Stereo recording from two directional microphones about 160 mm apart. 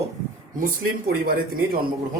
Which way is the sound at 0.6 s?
70° right (ahead or behind).